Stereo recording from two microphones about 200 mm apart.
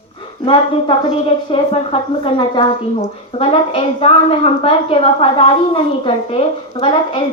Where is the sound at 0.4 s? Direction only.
25° left (ahead or behind).